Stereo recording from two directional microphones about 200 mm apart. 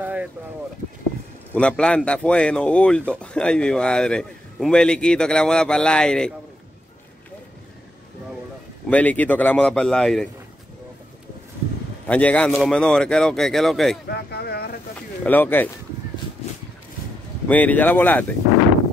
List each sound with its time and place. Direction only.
0.0 s a sound: 5° right (ahead or behind)
1.5 s a man's voice: 5° left (ahead or behind)
8.8 s a man's voice: 5° left (ahead or behind)
12.1 s a man's voice: 5° left (ahead or behind)
14.0 s a sound: 55° left (ahead or behind)
15.2 s speech: 10° left (ahead or behind)
17.5 s speech: 10° left (ahead or behind)